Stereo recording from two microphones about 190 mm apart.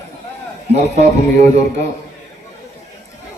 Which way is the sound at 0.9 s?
35° right (ahead or behind).